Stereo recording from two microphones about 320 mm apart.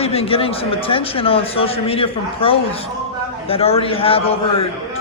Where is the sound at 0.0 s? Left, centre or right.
Centre.